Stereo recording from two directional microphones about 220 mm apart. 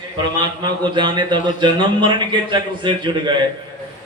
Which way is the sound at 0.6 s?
20° right (ahead or behind).